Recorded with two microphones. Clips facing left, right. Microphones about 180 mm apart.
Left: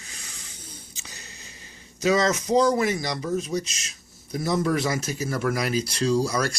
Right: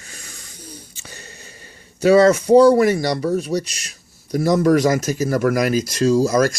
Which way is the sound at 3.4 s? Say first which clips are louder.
Right 5 dB; 60° right (ahead or behind).